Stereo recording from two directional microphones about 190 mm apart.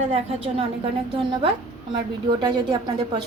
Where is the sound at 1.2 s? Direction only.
25° right (ahead or behind).